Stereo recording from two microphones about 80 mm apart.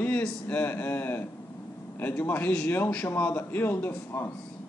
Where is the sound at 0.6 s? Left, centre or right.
Left.